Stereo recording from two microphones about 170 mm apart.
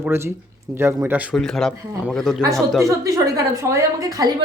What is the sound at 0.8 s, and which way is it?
Speech, 15° right (ahead or behind).